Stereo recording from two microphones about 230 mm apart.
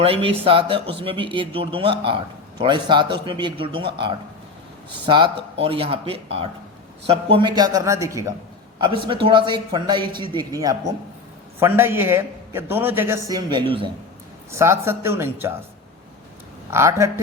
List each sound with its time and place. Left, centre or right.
0.0 s speech: right
7.3 s a man's voice: centre
16.7 s a man's voice: centre